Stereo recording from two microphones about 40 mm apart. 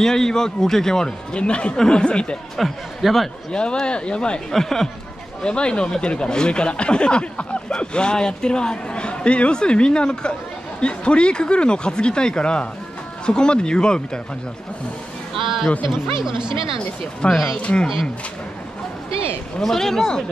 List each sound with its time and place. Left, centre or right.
0.0 s a man's voice: centre
1.3 s speech: left
2.5 s speech: centre
3.5 s speech: left
4.5 s a man's voice: centre
5.4 s speech: left
15.4 s speech: centre
17.2 s speech: left
19.6 s a man's voice: centre